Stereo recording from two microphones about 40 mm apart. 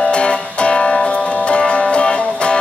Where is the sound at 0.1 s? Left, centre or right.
Left.